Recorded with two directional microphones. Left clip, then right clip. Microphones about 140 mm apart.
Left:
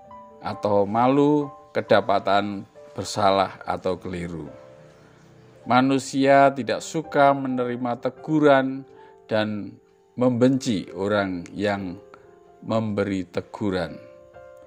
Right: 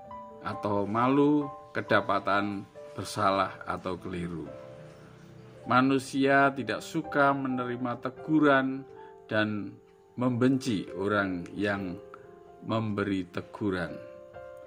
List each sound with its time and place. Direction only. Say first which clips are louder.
0.4 s speech: left 9 dB; 50° left (ahead or behind)
5.7 s speech: left 5 dB; 50° left (ahead or behind)